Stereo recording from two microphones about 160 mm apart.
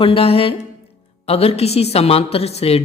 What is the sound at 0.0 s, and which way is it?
A woman's voice, 35° left (ahead or behind).